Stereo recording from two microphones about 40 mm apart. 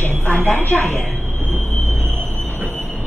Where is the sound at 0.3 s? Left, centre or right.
Left.